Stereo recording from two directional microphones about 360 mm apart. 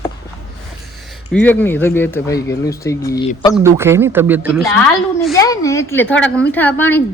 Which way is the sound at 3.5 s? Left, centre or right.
Centre.